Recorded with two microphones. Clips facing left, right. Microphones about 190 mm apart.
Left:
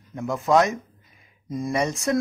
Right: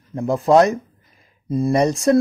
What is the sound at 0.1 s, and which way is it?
Speech, 35° right (ahead or behind).